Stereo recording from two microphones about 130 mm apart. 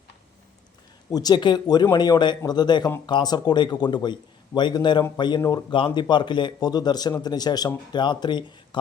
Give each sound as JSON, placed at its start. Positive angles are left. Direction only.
{"t": 1.1, "sound": "a man's voice", "side_deg": 30}